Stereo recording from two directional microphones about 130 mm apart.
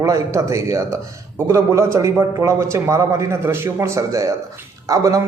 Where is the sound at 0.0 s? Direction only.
25° right (ahead or behind).